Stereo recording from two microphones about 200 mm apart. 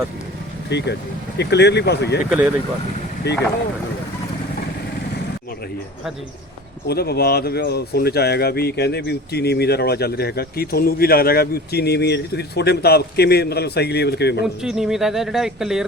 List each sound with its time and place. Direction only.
0.7 s speech: 60° left (ahead or behind)
3.3 s speech: 55° left (ahead or behind)
6.8 s speech: 50° left (ahead or behind)
14.4 s speech: centre (ahead or behind)